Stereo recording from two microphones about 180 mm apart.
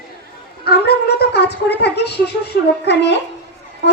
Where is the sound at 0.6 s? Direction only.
65° left (ahead or behind).